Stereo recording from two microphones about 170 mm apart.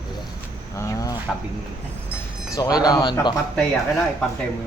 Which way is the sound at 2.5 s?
20° left (ahead or behind).